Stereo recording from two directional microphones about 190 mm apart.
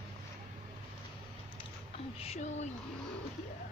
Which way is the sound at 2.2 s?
35° left (ahead or behind).